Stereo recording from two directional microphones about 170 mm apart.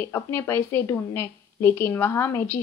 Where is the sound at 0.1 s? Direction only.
15° left (ahead or behind).